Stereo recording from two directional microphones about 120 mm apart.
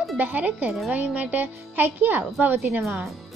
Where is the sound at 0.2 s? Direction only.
15° right (ahead or behind).